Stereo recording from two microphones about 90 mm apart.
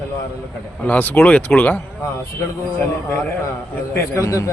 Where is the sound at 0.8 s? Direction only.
20° left (ahead or behind).